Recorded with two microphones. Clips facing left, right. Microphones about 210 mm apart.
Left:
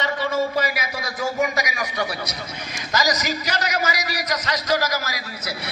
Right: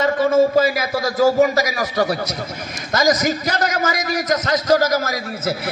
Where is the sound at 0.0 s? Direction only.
45° right (ahead or behind).